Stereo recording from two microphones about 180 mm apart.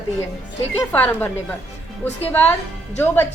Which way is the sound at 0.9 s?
10° left (ahead or behind).